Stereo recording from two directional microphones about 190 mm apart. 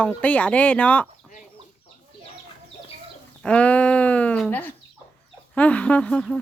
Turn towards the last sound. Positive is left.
turn(degrees=5)  # may be behind; listen again after turning